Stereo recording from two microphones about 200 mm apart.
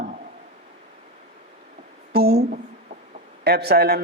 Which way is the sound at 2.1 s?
50° right (ahead or behind).